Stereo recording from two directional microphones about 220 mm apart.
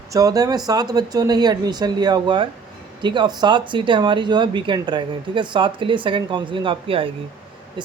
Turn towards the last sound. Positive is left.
turn(degrees=-20)  # may be behind; listen again after turning